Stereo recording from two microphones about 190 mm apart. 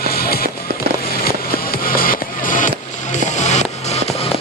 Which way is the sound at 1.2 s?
50° left (ahead or behind).